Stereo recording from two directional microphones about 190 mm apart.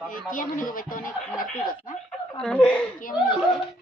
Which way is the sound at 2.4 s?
5° left (ahead or behind).